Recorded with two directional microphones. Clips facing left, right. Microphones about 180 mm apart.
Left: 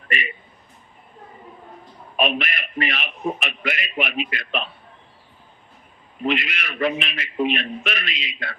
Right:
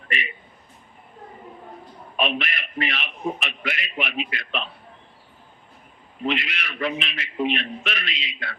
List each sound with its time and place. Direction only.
2.1 s a man's voice: 50° left (ahead or behind)
6.2 s a man's voice: 50° left (ahead or behind)